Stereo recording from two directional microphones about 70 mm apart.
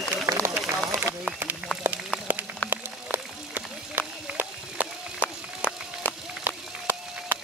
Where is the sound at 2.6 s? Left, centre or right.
Left.